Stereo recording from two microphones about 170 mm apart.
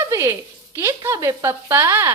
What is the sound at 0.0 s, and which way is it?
Speech, 15° right (ahead or behind).